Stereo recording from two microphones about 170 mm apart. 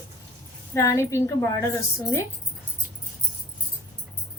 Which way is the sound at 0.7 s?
15° left (ahead or behind).